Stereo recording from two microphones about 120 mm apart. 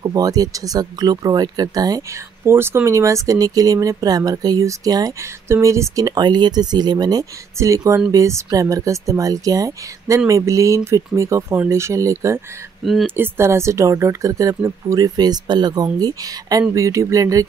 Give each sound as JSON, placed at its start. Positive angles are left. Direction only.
{"t": 0.0, "sound": "speech", "side_deg": -30}
{"t": 2.4, "sound": "speech", "side_deg": -20}
{"t": 12.8, "sound": "speech", "side_deg": 0}
{"t": 13.1, "sound": "speech", "side_deg": -20}